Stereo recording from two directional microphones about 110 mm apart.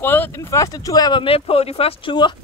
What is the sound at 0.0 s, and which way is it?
Speech, 20° left (ahead or behind).